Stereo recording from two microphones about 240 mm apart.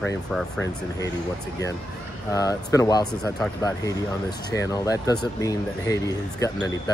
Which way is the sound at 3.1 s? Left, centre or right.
Centre.